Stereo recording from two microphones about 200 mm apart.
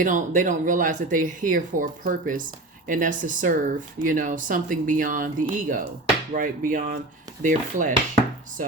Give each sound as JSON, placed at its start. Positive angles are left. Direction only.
{"t": 0.0, "sound": "speech", "side_deg": -40}